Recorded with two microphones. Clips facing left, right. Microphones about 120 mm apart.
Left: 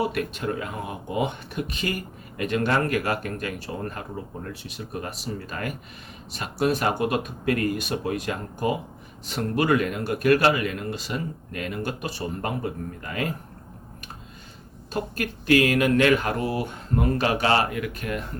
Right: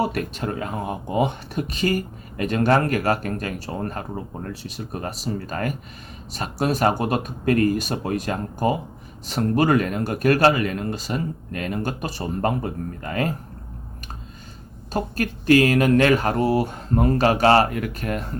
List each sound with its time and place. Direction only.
0.0 s speech: 40° right (ahead or behind)
14.9 s speech: 40° right (ahead or behind)